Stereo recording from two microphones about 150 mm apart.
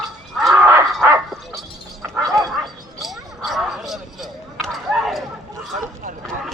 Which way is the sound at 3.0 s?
Centre (ahead or behind).